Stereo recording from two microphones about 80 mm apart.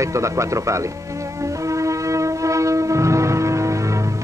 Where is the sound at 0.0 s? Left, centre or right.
Right.